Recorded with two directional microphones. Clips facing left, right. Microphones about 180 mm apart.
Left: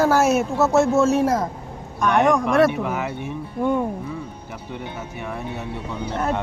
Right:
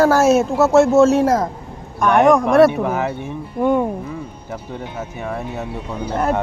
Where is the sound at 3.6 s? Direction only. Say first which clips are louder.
Right 5 dB; 85° right.